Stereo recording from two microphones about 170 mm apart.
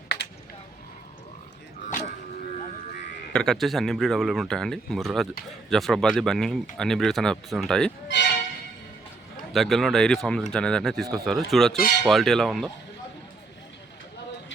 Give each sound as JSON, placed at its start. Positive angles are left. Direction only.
{"t": 3.3, "sound": "speech", "side_deg": 5}
{"t": 8.0, "sound": "music", "side_deg": 90}
{"t": 9.5, "sound": "speech", "side_deg": 0}
{"t": 11.8, "sound": "speech", "side_deg": 70}
{"t": 12.0, "sound": "speech", "side_deg": 0}